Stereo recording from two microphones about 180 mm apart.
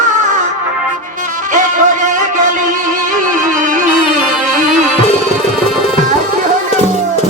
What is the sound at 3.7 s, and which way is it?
Music, 45° right (ahead or behind).